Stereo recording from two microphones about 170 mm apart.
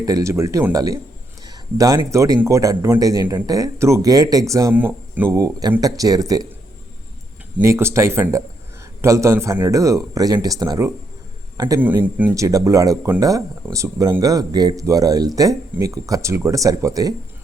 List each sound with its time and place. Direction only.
0.0 s speech: 20° right (ahead or behind)
1.5 s a sound: 20° right (ahead or behind)
2.0 s speech: 20° right (ahead or behind)
7.6 s a man's voice: 15° right (ahead or behind)
11.8 s speech: 10° right (ahead or behind)